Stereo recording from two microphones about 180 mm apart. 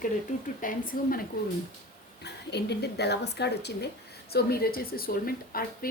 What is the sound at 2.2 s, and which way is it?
A woman's voice, 65° left (ahead or behind).